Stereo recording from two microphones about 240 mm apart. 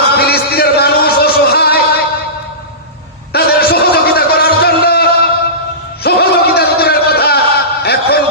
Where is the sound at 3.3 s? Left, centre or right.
Left.